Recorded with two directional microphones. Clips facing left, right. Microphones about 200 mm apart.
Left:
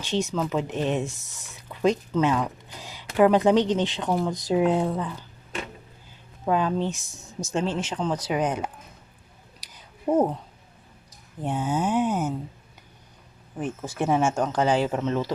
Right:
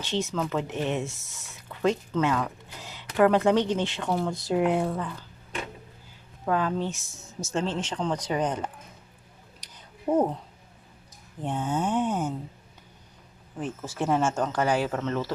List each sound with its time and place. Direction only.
0.0 s speech: 15° left (ahead or behind)
6.4 s speech: 20° left (ahead or behind)
9.6 s a sound: 5° left (ahead or behind)
11.4 s speech: 5° left (ahead or behind)
13.6 s speech: 15° left (ahead or behind)